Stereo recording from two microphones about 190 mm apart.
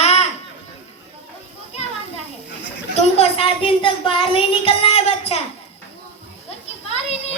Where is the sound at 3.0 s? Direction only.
30° left (ahead or behind).